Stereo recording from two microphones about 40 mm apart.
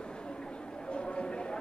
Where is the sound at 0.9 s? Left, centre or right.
Left.